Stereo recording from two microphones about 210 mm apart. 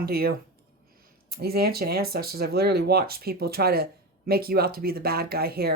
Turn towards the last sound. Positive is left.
turn(degrees=-45)  # may be behind; listen again after turning